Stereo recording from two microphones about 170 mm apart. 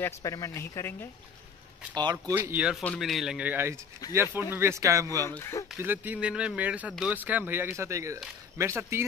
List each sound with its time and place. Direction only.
0.0 s speech: 20° left (ahead or behind)
2.0 s speech: 25° right (ahead or behind)
2.3 s speech: 10° right (ahead or behind)
2.8 s speech: 5° left (ahead or behind); by 5.2 s 20° right (ahead or behind)
5.2 s speech: 15° left (ahead or behind)
5.8 s speech: 10° right (ahead or behind)